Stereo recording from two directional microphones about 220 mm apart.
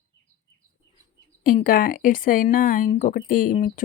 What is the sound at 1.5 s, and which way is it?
Speech, 40° left (ahead or behind).